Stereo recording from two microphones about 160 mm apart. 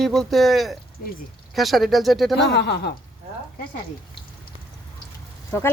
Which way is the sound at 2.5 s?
90° left.